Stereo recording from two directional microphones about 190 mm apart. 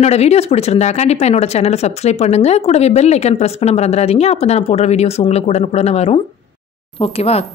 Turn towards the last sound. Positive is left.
turn(degrees=30)  # may be behind; listen again after turning